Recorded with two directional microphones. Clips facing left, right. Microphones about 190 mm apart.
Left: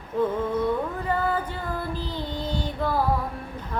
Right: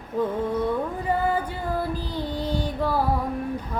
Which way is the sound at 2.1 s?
10° right (ahead or behind).